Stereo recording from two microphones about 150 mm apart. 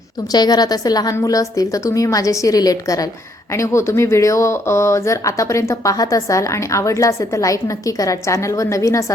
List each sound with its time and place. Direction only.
0.3 s speech: 25° left (ahead or behind)